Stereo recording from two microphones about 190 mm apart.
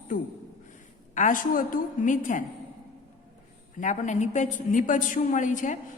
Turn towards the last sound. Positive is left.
turn(degrees=40)  # may be behind; listen again after turning